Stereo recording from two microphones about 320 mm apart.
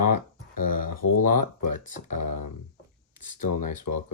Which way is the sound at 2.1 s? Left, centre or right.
Left.